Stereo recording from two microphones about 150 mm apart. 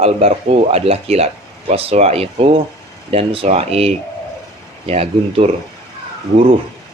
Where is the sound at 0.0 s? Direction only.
45° right (ahead or behind).